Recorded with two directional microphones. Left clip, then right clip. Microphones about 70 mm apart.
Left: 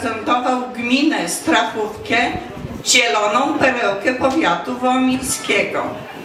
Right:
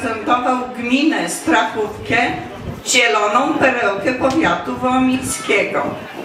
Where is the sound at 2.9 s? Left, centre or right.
Left.